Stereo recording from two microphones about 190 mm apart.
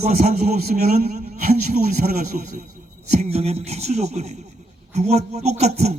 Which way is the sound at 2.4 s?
45° right (ahead or behind).